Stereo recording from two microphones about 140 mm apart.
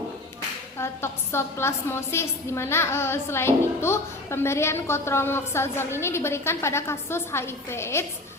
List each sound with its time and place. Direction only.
0.8 s a woman's voice: 20° left (ahead or behind)